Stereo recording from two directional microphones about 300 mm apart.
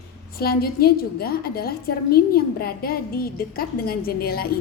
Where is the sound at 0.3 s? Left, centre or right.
Left.